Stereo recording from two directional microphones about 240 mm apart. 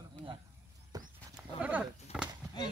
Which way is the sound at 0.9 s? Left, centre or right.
Centre.